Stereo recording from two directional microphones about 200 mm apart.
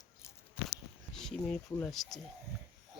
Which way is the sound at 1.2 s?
5° left (ahead or behind).